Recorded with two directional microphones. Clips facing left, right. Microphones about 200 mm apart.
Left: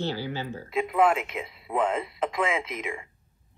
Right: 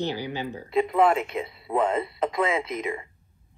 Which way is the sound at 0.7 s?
Centre (ahead or behind).